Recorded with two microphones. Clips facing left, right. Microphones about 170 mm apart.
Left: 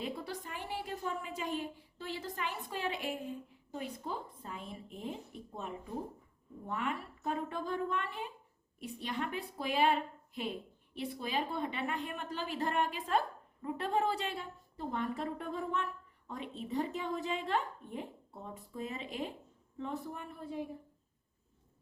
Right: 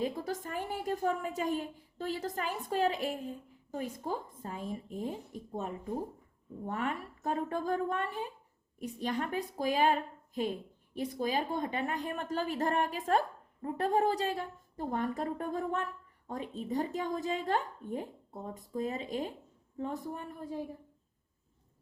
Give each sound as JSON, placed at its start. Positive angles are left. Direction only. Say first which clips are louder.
{"t": 0.0, "sound": "a woman's voice", "louder": "right 6 dB", "side_deg": -45}